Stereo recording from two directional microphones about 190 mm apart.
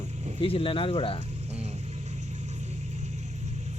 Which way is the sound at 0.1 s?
35° right (ahead or behind).